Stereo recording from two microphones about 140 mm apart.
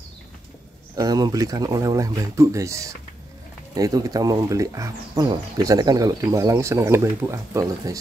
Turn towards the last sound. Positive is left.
turn(degrees=-20)  # may be behind; listen again after turning